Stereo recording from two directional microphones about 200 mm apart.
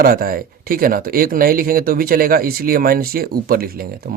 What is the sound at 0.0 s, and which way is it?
Speech, 45° right (ahead or behind).